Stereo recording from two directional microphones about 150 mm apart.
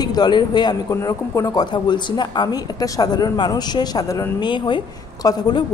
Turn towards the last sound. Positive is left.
turn(degrees=25)  # may be behind; listen again after turning